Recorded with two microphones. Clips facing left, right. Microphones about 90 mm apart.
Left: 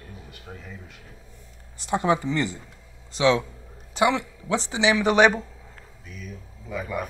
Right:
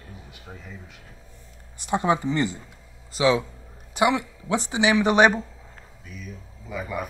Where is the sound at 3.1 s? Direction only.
5° right (ahead or behind).